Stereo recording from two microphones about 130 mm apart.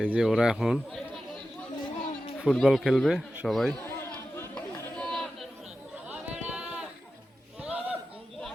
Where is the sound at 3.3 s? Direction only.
10° right (ahead or behind).